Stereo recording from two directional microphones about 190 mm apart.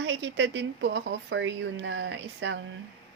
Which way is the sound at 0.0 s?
75° right (ahead or behind).